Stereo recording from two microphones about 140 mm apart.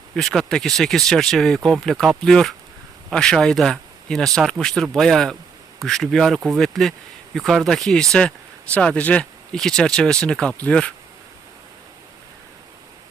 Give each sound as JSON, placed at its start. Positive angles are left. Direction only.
{"t": 0.2, "sound": "speech", "side_deg": 0}